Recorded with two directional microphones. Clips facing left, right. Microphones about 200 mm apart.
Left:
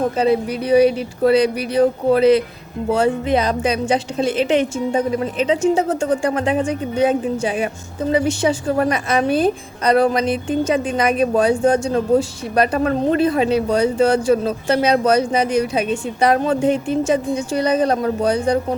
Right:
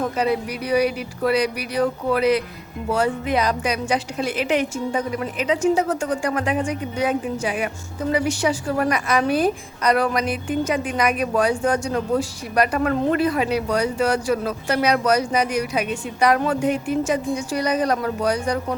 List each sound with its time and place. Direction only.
0.0 s a woman's voice: 25° left (ahead or behind)